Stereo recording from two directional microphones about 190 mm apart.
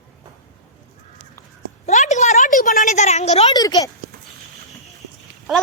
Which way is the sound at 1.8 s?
35° left (ahead or behind).